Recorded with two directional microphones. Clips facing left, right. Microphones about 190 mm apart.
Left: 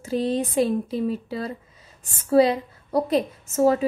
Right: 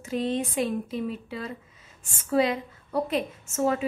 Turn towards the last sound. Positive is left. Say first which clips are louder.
# left 6 dB
turn(degrees=35)  # may be behind; listen again after turning